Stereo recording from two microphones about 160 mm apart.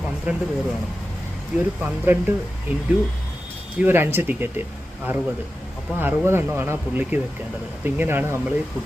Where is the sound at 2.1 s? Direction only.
15° right (ahead or behind).